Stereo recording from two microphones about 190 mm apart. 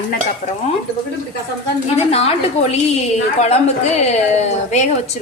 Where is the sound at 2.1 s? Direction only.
30° left (ahead or behind).